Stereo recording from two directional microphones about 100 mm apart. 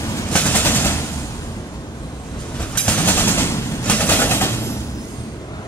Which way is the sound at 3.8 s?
15° left (ahead or behind).